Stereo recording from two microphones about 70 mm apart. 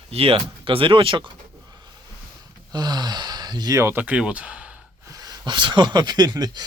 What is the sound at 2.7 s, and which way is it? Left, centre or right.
Speech, right.